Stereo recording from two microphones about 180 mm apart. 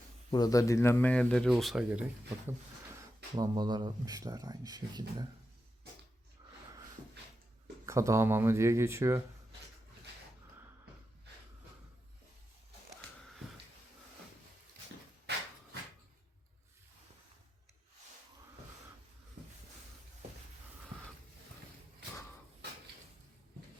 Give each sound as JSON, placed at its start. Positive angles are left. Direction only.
{"t": 0.3, "sound": "speech", "side_deg": 20}
{"t": 3.3, "sound": "speech", "side_deg": -20}
{"t": 7.9, "sound": "speech", "side_deg": -15}